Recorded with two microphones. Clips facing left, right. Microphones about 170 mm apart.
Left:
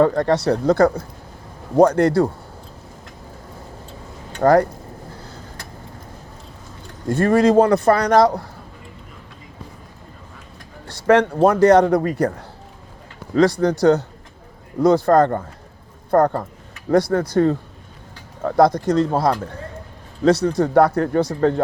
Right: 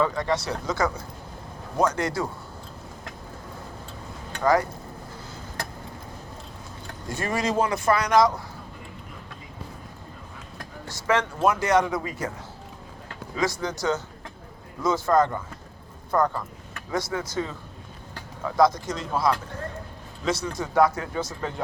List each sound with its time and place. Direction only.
0.0 s speech: 60° left (ahead or behind)
4.4 s speech: 60° left (ahead or behind)
7.1 s speech: 55° left (ahead or behind)
10.8 s speech: 60° left (ahead or behind)
13.3 s speech: 60° left (ahead or behind)